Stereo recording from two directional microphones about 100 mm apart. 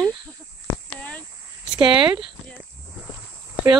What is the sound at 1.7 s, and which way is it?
Speech, 55° right (ahead or behind).